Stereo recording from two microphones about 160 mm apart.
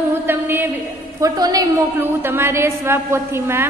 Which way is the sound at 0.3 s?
15° right (ahead or behind).